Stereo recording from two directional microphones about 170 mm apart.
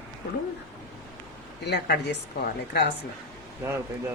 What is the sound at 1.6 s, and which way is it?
Speech, 80° left.